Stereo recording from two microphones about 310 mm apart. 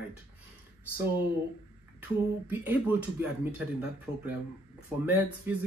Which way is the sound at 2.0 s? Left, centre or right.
Centre.